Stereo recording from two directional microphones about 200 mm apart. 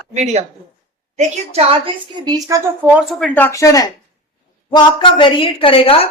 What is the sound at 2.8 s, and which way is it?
A woman's voice, 5° right (ahead or behind).